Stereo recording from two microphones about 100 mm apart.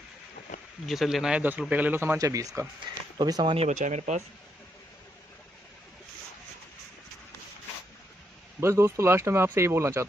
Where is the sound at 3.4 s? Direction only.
85° right.